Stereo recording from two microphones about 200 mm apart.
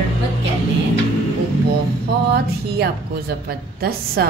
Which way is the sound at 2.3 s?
55° right (ahead or behind).